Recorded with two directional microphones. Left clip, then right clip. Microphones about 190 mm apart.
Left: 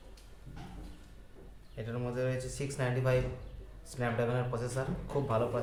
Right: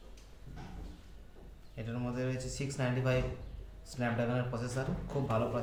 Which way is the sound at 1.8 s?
15° left (ahead or behind).